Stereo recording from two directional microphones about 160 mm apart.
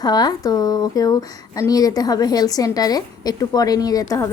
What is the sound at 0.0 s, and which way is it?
A woman's voice, 25° left (ahead or behind).